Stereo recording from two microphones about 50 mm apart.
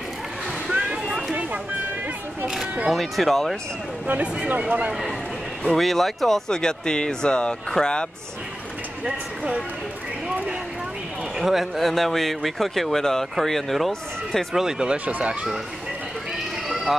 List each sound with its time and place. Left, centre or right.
2.9 s speech: centre
4.5 s speech: right
5.8 s speech: centre
9.0 s speech: right
11.3 s speech: centre
15.0 s speech: right